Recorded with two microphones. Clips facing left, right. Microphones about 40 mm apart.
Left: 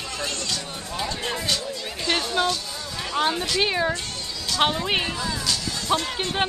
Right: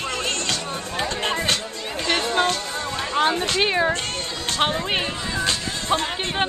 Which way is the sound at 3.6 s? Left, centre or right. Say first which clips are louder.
Right 4 dB; centre.